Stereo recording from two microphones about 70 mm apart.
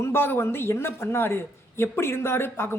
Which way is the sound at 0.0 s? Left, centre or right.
Left.